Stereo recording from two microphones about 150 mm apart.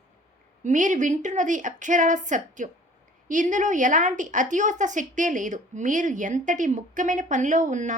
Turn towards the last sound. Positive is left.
turn(degrees=-55)  # may be behind; listen again after turning